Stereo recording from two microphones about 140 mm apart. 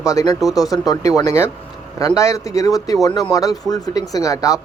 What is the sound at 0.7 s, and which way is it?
Speech, 25° left (ahead or behind).